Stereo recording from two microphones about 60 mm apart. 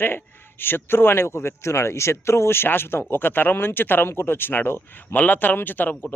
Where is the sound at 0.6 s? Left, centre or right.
Left.